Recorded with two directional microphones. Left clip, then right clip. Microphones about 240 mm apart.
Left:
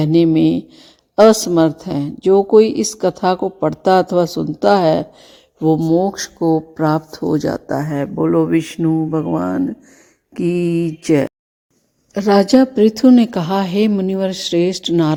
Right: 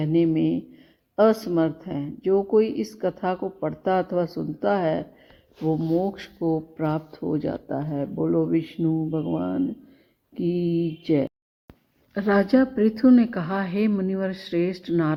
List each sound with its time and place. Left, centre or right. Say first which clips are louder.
0.0 s speech: left 9 dB; left
1.2 s speech: left 10 dB; left
2.6 s speech: left 10 dB; left
2.9 s speech: left 10 dB; left
4.7 s speech: left 11 dB; left
5.9 s speech: left 9 dB; left